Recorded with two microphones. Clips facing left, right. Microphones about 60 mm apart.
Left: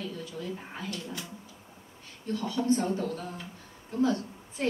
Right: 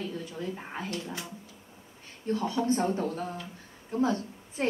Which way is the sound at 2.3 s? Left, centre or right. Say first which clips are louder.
Even; right.